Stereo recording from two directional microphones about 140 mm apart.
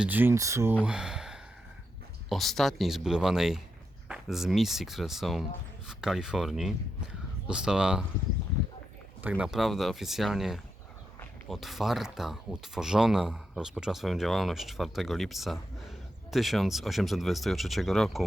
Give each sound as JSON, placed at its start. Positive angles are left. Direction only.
{"t": 0.0, "sound": "speech", "side_deg": -15}
{"t": 0.9, "sound": "speech", "side_deg": -5}
{"t": 9.4, "sound": "speech", "side_deg": -5}